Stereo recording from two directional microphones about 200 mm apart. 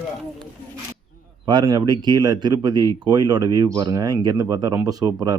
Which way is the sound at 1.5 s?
20° right (ahead or behind).